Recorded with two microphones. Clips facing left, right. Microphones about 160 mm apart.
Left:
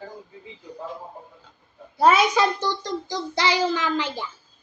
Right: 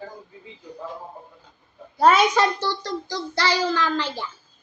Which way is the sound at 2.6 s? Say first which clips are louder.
Even; 15° left (ahead or behind).